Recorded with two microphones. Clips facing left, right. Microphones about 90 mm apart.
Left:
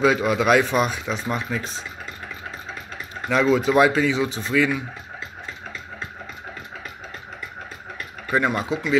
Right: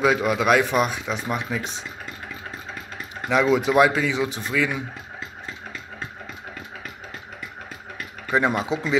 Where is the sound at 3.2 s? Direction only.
10° right (ahead or behind).